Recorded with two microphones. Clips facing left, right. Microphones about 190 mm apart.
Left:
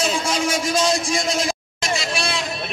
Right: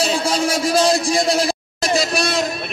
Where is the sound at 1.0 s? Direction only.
35° right (ahead or behind).